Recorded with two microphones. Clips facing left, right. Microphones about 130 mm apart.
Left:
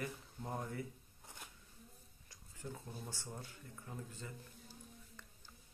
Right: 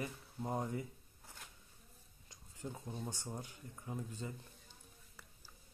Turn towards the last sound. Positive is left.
turn(degrees=-20)  # may be behind; listen again after turning